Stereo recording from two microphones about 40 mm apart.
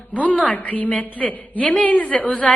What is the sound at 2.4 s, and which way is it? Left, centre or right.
Speech, centre.